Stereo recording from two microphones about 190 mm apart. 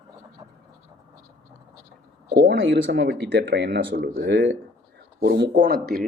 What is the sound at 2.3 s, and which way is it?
Speech, 60° right (ahead or behind).